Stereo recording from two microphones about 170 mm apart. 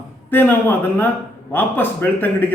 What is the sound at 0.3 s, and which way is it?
Speech, 10° left (ahead or behind).